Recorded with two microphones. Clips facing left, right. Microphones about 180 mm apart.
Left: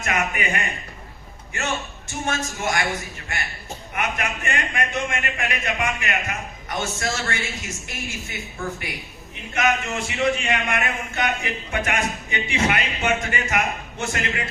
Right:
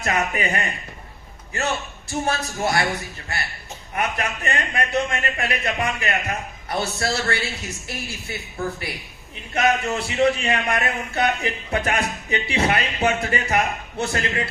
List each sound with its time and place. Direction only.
0.0 s a man's voice: 35° right (ahead or behind)